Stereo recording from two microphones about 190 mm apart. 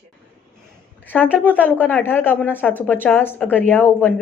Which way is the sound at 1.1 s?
10° left (ahead or behind).